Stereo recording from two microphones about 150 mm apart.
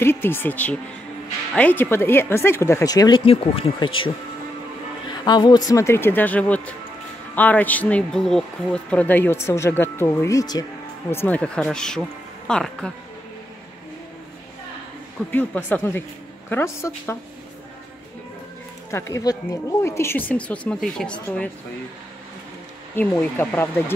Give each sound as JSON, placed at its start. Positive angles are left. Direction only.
{"t": 0.0, "sound": "speech", "side_deg": 15}
{"t": 3.3, "sound": "speech", "side_deg": 40}
{"t": 5.1, "sound": "speech", "side_deg": 30}
{"t": 11.1, "sound": "a woman's voice", "side_deg": 15}
{"t": 15.3, "sound": "speech", "side_deg": 10}
{"t": 18.9, "sound": "speech", "side_deg": 20}
{"t": 22.9, "sound": "speech", "side_deg": 15}